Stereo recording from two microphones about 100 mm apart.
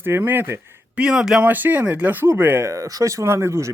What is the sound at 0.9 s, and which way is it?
Speech, 10° right (ahead or behind).